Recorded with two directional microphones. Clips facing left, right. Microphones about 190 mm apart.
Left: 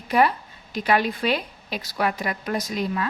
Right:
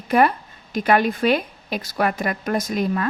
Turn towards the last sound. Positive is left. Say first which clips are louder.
# right 4 dB
turn(degrees=-50)  # may be behind; listen again after turning